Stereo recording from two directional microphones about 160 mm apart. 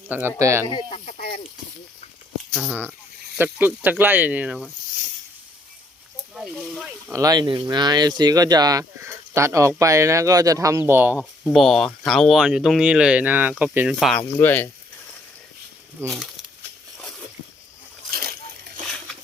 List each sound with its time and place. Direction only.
0.1 s speech: 15° right (ahead or behind)
0.7 s speech: 35° left (ahead or behind)
2.6 s speech: 10° right (ahead or behind)
6.3 s speech: 5° right (ahead or behind)
7.1 s speech: 20° right (ahead or behind)
11.2 s speech: 5° left (ahead or behind)
14.2 s speech: 15° left (ahead or behind)
16.0 s speech: centre (ahead or behind)
18.1 s splash: 70° right (ahead or behind)